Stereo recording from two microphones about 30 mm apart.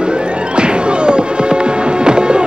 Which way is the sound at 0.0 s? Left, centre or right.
Right.